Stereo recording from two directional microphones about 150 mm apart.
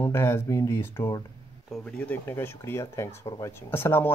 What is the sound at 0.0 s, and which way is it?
Speech, 15° left (ahead or behind).